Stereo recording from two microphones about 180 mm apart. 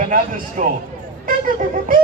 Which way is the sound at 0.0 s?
45° right (ahead or behind).